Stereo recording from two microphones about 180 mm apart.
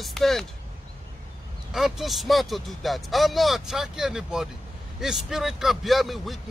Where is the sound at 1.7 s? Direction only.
Centre (ahead or behind).